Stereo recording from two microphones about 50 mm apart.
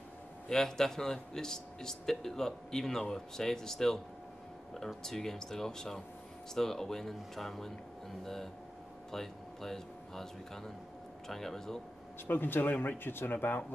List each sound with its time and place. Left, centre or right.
0.5 s a man's voice: centre
12.3 s speech: left